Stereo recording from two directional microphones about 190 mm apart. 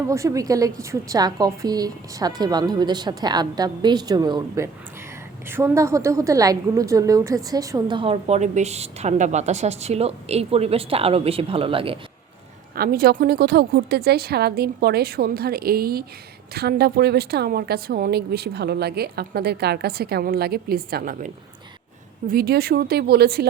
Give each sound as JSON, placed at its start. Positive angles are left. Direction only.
{"t": 0.1, "sound": "a woman's voice", "side_deg": -15}
{"t": 12.7, "sound": "a woman's voice", "side_deg": -50}
{"t": 22.3, "sound": "speech", "side_deg": -55}